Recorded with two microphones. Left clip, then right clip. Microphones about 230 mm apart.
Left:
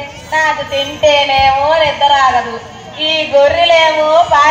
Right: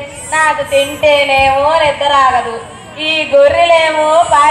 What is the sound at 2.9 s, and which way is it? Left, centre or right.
Speech, right.